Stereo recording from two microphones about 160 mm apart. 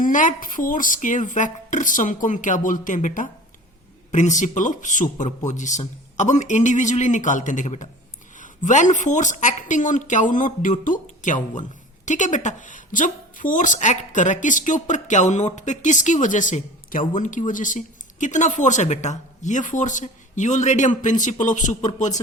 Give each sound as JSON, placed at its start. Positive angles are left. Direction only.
{"t": 0.0, "sound": "a woman's voice", "side_deg": 55}